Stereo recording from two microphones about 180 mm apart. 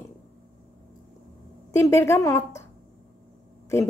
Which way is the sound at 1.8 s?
15° left (ahead or behind).